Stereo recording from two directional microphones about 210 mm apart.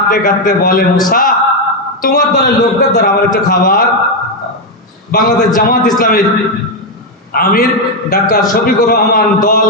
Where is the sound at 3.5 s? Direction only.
40° left (ahead or behind).